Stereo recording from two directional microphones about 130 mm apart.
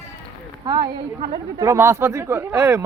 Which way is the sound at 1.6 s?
20° right (ahead or behind).